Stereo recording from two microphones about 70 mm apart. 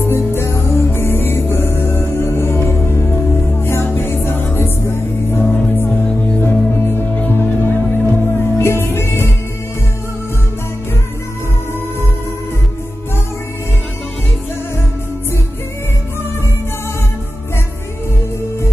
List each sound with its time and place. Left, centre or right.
0.0 s music: left
6.4 s music: left